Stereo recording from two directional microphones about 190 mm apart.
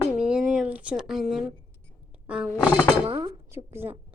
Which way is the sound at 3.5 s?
10° right (ahead or behind).